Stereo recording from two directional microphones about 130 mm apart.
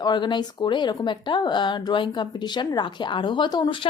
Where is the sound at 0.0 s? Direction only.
35° left (ahead or behind).